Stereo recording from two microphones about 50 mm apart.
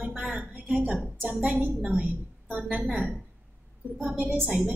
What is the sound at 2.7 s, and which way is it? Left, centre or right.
Speech, right.